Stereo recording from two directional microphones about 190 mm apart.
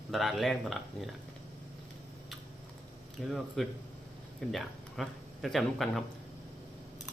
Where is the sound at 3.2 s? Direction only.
Centre (ahead or behind).